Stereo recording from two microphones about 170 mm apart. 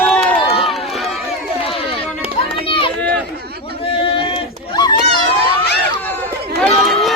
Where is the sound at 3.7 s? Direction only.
35° left (ahead or behind).